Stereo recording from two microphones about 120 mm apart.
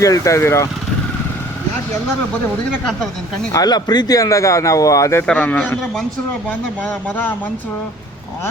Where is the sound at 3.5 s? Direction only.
35° left (ahead or behind).